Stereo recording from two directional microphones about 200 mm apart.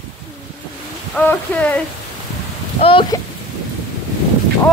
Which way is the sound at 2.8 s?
25° left (ahead or behind).